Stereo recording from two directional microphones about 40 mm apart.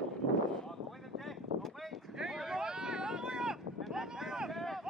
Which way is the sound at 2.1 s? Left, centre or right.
Centre.